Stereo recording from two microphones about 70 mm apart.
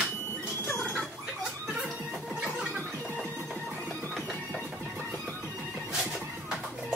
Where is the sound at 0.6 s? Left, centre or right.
Left.